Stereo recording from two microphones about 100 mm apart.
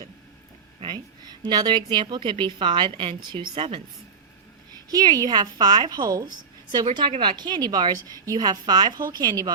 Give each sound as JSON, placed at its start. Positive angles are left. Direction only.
{"t": 0.9, "sound": "a woman's voice", "side_deg": -45}
{"t": 4.9, "sound": "a woman's voice", "side_deg": -40}